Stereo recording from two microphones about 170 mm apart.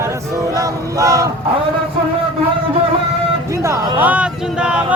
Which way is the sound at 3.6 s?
15° right (ahead or behind).